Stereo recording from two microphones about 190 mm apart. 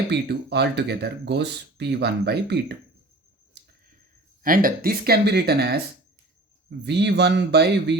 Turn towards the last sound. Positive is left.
turn(degrees=-60)  # may be behind; listen again after turning